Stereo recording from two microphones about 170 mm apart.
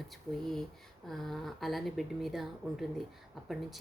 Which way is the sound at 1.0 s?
Centre (ahead or behind).